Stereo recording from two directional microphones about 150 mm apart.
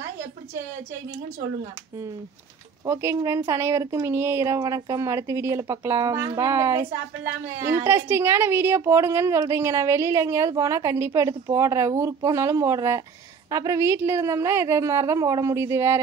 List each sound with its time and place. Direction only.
2.8 s a woman's voice: 20° right (ahead or behind)